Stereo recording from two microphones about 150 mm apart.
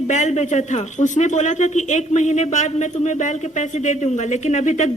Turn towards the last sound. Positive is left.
turn(degrees=55)  # may be behind; listen again after turning